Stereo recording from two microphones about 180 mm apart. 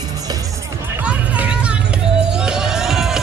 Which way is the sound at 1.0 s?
5° right (ahead or behind).